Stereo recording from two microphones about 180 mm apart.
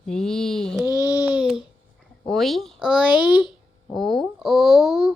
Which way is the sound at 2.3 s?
Centre (ahead or behind).